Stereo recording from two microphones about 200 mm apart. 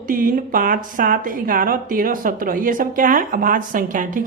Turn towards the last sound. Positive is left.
turn(degrees=-40)  # may be behind; listen again after turning